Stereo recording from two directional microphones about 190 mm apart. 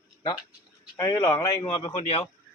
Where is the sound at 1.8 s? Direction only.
35° left (ahead or behind).